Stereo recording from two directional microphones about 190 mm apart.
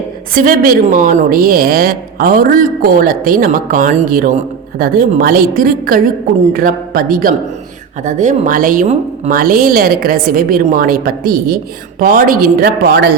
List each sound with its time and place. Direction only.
0.3 s a woman's voice: 50° right (ahead or behind)
9.4 s a woman's voice: 50° right (ahead or behind)